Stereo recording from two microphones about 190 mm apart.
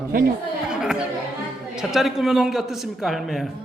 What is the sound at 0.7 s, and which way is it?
Chatter, 5° right (ahead or behind).